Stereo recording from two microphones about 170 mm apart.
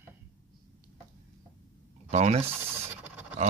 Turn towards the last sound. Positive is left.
turn(degrees=-10)  # may be behind; listen again after turning